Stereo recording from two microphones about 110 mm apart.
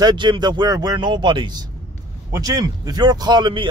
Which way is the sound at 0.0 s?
40° right (ahead or behind).